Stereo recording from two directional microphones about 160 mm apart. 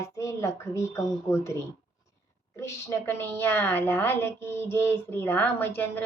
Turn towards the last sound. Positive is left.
turn(degrees=10)  # may be behind; listen again after turning